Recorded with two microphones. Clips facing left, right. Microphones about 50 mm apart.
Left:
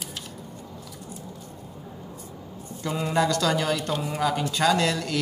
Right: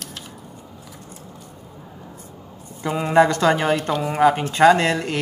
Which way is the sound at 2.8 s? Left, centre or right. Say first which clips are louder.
Right 8 dB; right.